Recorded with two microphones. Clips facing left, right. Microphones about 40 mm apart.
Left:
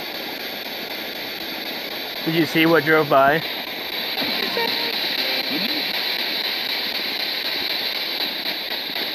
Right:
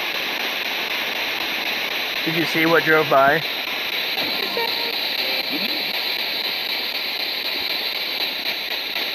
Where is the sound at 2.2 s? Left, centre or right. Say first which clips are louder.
Left 3 dB; right.